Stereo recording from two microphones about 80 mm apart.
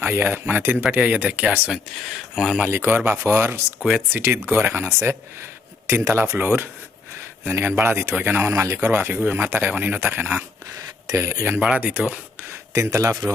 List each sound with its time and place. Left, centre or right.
0.0 s speech: right
0.8 s speech: centre
1.7 s speech: centre
2.6 s speech: right
3.8 s speech: centre
4.1 s speech: right
5.9 s speech: right
8.4 s speech: right
11.1 s speech: right
11.6 s speech: centre
12.7 s speech: right